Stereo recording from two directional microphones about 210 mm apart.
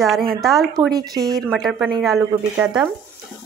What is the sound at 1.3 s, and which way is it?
Speech, centre (ahead or behind).